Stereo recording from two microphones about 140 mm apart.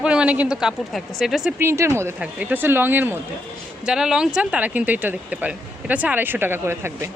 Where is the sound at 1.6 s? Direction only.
20° right (ahead or behind).